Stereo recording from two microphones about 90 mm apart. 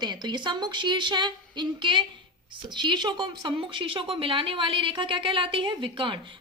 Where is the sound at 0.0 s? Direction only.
55° right (ahead or behind).